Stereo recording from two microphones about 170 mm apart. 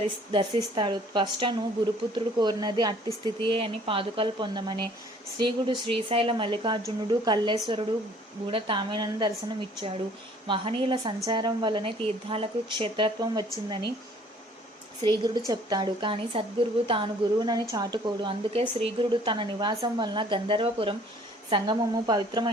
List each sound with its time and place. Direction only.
0.3 s speech: 30° right (ahead or behind)
15.0 s speech: 25° right (ahead or behind)